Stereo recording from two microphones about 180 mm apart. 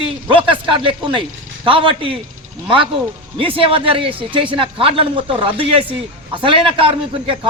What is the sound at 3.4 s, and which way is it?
Speech, 30° right (ahead or behind).